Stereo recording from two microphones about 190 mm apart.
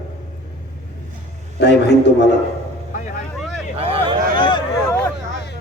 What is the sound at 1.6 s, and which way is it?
Speech, 65° left (ahead or behind).